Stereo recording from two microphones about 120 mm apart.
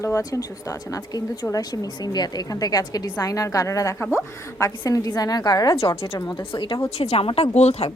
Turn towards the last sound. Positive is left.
turn(degrees=60)  # may be behind; listen again after turning